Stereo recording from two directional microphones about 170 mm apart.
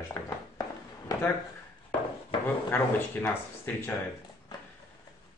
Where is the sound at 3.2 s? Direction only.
Centre (ahead or behind).